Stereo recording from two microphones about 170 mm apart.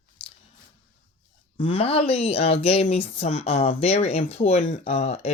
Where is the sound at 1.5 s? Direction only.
35° left (ahead or behind).